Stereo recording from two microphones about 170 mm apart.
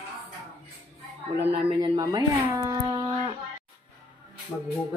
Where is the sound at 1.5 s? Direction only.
30° right (ahead or behind).